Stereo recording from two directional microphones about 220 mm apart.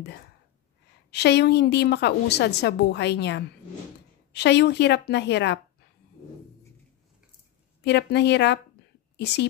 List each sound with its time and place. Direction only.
1.1 s a woman's voice: 50° left (ahead or behind)
7.8 s a woman's voice: 50° left (ahead or behind)